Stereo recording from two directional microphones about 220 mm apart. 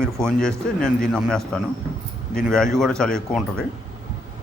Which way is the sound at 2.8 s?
5° left (ahead or behind).